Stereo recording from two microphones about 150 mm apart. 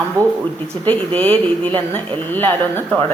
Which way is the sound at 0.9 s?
10° left (ahead or behind).